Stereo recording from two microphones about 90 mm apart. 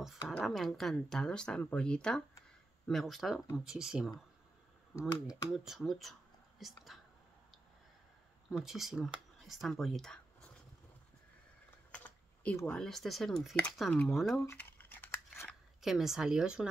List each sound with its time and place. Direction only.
0.4 s speech: centre (ahead or behind)
8.6 s speech: 5° right (ahead or behind)
11.9 s typing: 15° left (ahead or behind)
12.6 s speech: 10° left (ahead or behind)
14.6 s scissors: 20° left (ahead or behind)
15.8 s speech: 5° right (ahead or behind)